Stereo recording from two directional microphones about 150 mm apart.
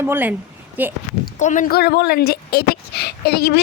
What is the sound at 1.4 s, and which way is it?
Speech, 60° left (ahead or behind).